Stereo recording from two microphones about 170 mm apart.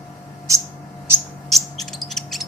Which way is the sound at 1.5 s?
Centre (ahead or behind).